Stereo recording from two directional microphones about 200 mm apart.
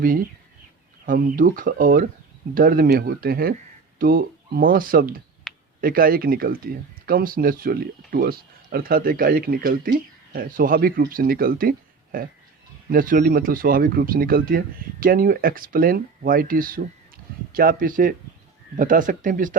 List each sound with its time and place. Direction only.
1.0 s speech: 45° right (ahead or behind)
5.5 s a sound: centre (ahead or behind)
5.8 s speech: 45° right (ahead or behind)